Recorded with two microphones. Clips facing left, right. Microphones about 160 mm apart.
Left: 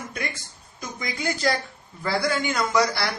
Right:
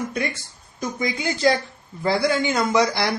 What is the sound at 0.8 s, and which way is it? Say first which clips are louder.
A man's voice: right 5 dB; 25° right (ahead or behind).